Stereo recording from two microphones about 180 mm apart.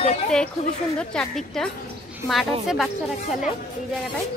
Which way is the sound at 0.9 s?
5° left (ahead or behind).